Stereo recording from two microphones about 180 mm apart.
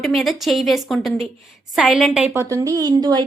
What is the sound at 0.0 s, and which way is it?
A woman's voice, centre (ahead or behind).